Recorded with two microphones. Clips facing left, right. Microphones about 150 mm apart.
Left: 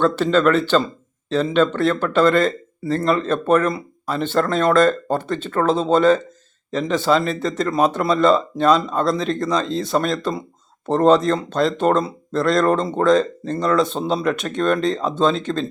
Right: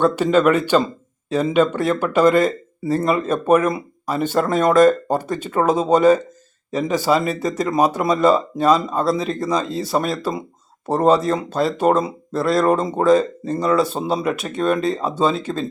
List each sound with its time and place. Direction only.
0.0 s speech: 10° right (ahead or behind)